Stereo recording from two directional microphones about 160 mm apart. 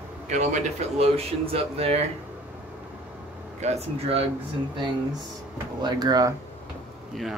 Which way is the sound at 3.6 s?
40° right (ahead or behind).